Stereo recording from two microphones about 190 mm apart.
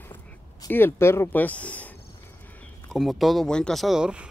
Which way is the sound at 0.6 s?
10° left (ahead or behind).